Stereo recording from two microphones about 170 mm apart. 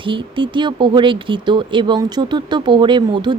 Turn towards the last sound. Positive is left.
turn(degrees=-25)  # may be behind; listen again after turning